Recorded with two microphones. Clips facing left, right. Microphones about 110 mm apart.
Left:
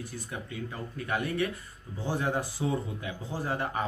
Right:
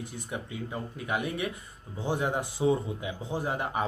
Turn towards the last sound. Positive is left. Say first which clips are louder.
# right 1 dB
turn(degrees=-15)  # may be behind; listen again after turning